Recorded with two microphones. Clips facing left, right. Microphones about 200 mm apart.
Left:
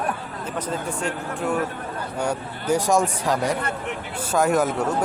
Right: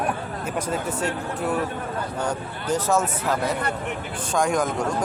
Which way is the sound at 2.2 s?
10° left (ahead or behind).